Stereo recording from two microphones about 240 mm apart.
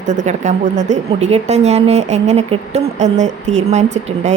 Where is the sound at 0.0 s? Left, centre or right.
Right.